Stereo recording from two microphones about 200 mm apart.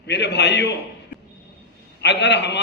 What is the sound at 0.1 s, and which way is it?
Speech, 55° left (ahead or behind).